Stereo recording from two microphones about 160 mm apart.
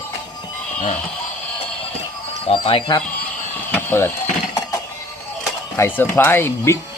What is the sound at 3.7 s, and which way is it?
Mechanisms, 10° left (ahead or behind).